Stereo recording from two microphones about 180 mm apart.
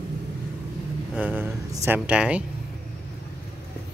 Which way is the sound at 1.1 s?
10° right (ahead or behind).